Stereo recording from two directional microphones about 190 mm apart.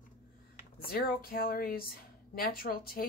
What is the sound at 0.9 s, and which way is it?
Speech, 50° left (ahead or behind).